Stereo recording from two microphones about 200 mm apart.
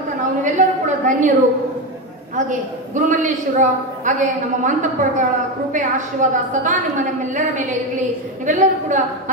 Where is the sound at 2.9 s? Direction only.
40° right (ahead or behind).